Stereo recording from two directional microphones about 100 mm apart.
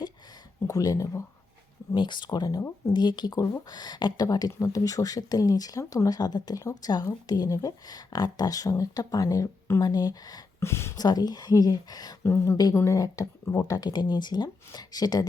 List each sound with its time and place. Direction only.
0.7 s speech: 35° left (ahead or behind)
1.9 s speech: 50° left (ahead or behind)
10.6 s speech: 25° left (ahead or behind)
10.9 s speech: 40° left (ahead or behind)
12.2 s speech: 25° left (ahead or behind)